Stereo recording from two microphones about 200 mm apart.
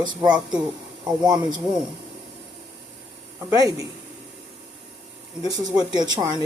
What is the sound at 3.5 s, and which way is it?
Speech, 15° right (ahead or behind).